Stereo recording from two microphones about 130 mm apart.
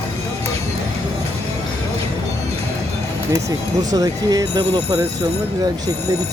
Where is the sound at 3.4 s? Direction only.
30° right (ahead or behind).